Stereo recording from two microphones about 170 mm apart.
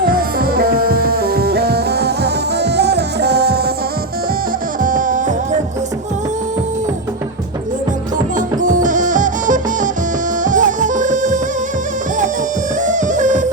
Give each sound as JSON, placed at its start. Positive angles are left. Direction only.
{"t": 0.0, "sound": "music", "side_deg": -60}
{"t": 4.8, "sound": "music", "side_deg": -50}
{"t": 8.6, "sound": "music", "side_deg": -50}
{"t": 12.8, "sound": "music", "side_deg": -45}